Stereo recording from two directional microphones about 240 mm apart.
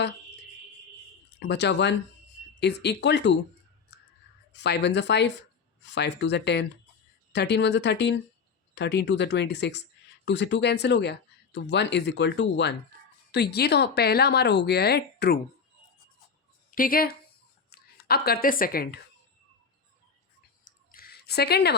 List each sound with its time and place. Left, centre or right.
1.4 s speech: left
3.9 s whispering: left
4.5 s speech: left
16.7 s speech: left
20.7 s a sound: left